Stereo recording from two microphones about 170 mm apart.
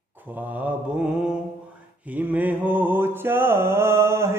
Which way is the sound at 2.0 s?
10° right (ahead or behind).